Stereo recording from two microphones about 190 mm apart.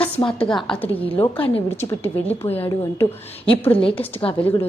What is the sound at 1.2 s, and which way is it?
Speech, 30° left (ahead or behind).